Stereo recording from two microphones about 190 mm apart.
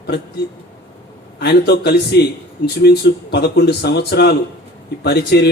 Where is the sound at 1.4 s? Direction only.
60° left (ahead or behind).